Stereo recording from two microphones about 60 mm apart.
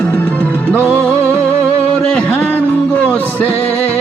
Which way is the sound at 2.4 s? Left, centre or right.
Left.